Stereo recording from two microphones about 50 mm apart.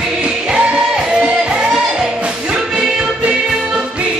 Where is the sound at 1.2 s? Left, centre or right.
Right.